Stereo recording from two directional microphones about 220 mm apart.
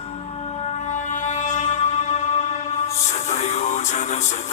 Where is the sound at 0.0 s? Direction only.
25° left (ahead or behind).